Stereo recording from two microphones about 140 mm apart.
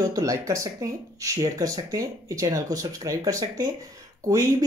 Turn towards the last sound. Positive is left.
turn(degrees=-25)  # may be behind; listen again after turning